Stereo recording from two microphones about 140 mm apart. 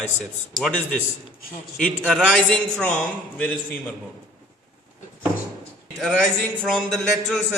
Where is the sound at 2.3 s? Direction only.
10° left (ahead or behind).